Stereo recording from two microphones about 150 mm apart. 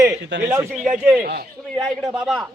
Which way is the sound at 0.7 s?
5° right (ahead or behind).